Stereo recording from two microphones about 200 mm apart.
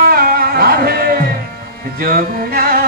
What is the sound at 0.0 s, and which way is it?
Music, 50° right (ahead or behind).